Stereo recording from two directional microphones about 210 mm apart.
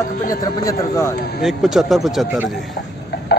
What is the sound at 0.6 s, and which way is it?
Speech, 15° left (ahead or behind).